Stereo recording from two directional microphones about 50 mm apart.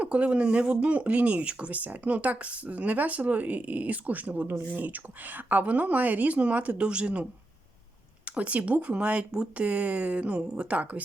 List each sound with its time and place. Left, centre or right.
0.0 s speech: right